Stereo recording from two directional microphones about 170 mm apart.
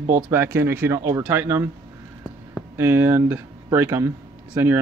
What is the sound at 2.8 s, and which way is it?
Speech, 15° right (ahead or behind).